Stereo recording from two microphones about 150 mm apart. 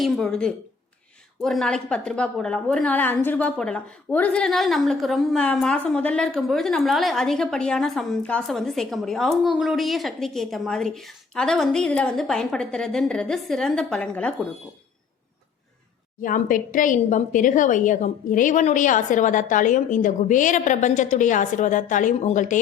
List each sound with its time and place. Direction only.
0.0 s a woman's voice: 5° left (ahead or behind)
16.2 s a woman's voice: 65° left (ahead or behind)